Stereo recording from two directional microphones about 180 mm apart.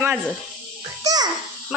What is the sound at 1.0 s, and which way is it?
Babbling, 20° right (ahead or behind).